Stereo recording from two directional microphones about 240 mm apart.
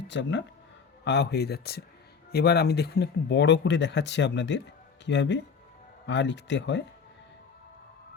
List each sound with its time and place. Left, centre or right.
0.1 s speech: left